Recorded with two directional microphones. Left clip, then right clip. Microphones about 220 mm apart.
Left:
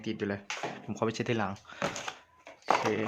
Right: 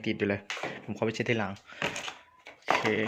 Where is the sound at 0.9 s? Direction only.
5° left (ahead or behind).